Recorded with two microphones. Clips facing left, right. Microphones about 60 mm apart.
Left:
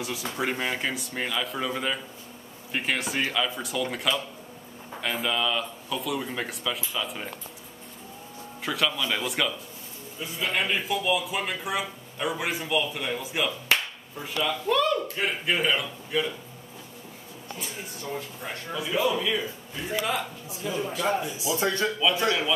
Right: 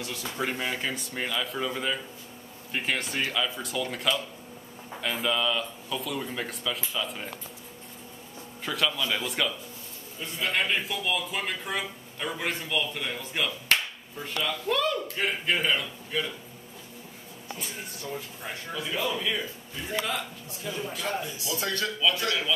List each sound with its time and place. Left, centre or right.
0.0 s a man's voice: centre
5.2 s a man's voice: centre
8.6 s a man's voice: centre
18.1 s a man's voice: centre; by 22.5 s left